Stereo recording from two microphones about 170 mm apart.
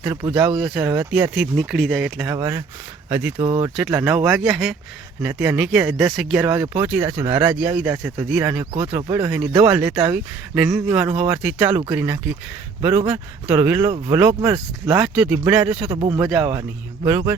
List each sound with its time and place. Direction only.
0.3 s speech: 5° right (ahead or behind)
2.3 s speech: 15° right (ahead or behind)
3.3 s speech: 35° right (ahead or behind)
3.8 s speech: 5° right (ahead or behind)